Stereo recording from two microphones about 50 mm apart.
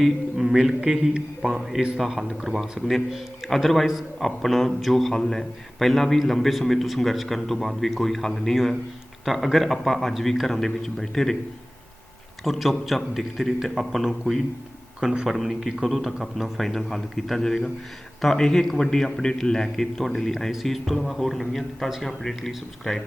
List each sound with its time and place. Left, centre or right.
0.0 s a man's voice: centre
1.1 s a man's voice: centre
2.0 s a man's voice: centre
12.5 s a man's voice: centre